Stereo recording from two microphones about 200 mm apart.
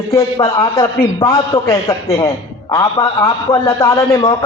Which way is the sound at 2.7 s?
15° left (ahead or behind).